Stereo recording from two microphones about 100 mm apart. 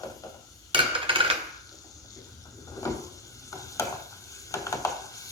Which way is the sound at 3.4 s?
35° left (ahead or behind).